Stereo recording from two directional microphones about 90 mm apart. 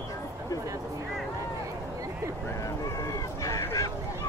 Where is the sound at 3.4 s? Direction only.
40° left (ahead or behind).